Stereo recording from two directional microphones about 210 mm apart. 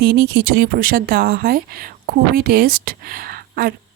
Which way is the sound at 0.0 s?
45° right (ahead or behind).